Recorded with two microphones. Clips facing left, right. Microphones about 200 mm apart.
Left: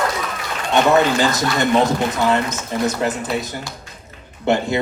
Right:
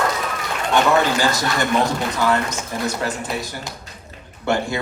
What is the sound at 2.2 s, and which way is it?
Speech, 20° left (ahead or behind).